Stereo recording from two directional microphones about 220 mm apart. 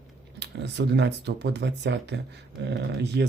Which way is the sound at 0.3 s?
50° right (ahead or behind).